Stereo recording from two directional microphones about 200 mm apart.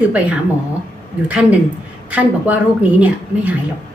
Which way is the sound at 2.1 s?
10° right (ahead or behind).